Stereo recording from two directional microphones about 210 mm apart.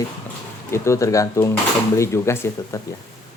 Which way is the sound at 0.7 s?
15° left (ahead or behind).